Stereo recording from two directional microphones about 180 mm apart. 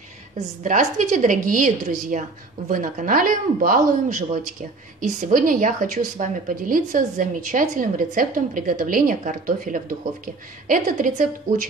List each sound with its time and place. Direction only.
0.4 s a woman's voice: 45° right (ahead or behind)